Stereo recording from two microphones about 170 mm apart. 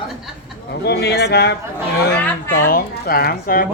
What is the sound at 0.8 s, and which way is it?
Speech, 75° left (ahead or behind).